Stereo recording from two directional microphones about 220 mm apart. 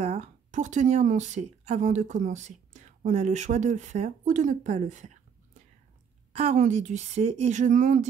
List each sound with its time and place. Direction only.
0.0 s speech: 30° right (ahead or behind)